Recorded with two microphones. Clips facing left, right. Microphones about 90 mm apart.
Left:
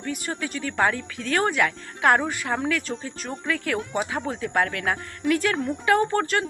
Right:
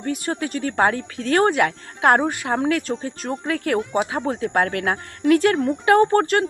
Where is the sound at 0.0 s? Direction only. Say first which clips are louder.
Right 5 dB; 45° right (ahead or behind).